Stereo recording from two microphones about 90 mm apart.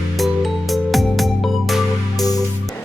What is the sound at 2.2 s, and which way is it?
Music, 45° left (ahead or behind).